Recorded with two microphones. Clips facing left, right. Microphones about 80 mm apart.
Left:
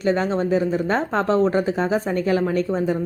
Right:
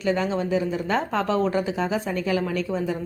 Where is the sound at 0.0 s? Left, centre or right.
Left.